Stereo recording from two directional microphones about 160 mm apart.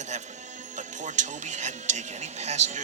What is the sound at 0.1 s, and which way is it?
Music, 50° right (ahead or behind).